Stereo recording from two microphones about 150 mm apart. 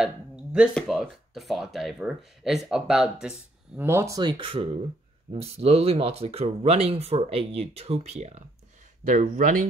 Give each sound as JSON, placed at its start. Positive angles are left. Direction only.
{"t": 0.0, "sound": "a sound", "side_deg": -5}
{"t": 0.7, "sound": "speech", "side_deg": 0}
{"t": 3.8, "sound": "speech", "side_deg": -15}
{"t": 9.0, "sound": "speech", "side_deg": -60}